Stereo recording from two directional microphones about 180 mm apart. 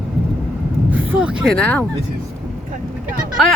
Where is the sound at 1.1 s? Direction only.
5° right (ahead or behind).